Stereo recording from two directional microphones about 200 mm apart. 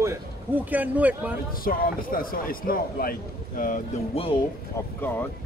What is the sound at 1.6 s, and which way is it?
Speech, 45° left (ahead or behind).